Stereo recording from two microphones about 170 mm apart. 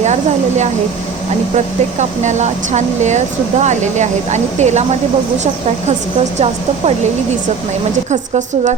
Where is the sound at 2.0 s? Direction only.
45° right (ahead or behind).